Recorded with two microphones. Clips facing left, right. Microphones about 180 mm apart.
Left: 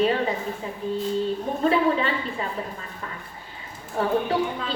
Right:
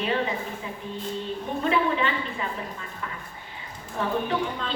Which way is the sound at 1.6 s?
35° left (ahead or behind).